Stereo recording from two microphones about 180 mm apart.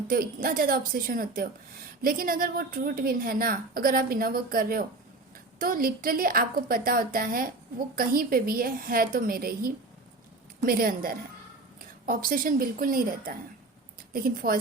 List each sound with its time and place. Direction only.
0.1 s a woman's voice: 50° right (ahead or behind)